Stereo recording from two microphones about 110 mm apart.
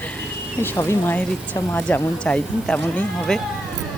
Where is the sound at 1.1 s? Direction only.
15° left (ahead or behind).